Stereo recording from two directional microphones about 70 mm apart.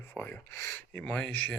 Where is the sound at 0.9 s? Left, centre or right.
Centre.